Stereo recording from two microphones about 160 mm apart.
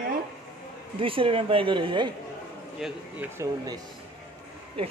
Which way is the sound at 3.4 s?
20° right (ahead or behind).